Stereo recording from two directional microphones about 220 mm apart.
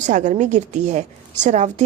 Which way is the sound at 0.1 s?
35° right (ahead or behind).